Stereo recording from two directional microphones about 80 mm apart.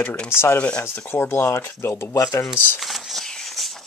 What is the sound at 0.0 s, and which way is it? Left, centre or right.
Speech, left.